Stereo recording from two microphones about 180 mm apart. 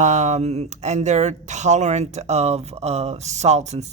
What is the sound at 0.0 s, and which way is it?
Speech, 40° right (ahead or behind).